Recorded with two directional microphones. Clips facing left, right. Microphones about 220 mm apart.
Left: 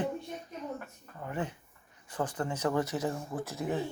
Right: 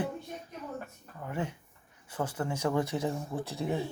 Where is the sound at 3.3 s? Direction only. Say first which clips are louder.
Right 1 dB; 30° right (ahead or behind).